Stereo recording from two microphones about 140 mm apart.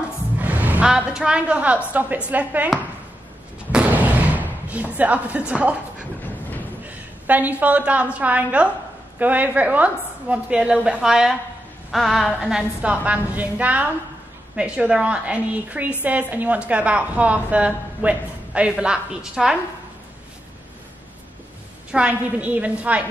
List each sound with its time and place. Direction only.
0.4 s a sound: 10° right (ahead or behind)
1.9 s a woman's voice: 10° right (ahead or behind)
3.7 s slam: 10° right (ahead or behind)
5.5 s speech: 10° right (ahead or behind)
7.2 s a woman's voice: 10° right (ahead or behind)
21.9 s a woman's voice: 10° right (ahead or behind)